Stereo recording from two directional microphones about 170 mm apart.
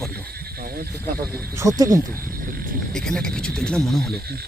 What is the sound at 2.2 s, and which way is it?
Wild animals, 55° right (ahead or behind).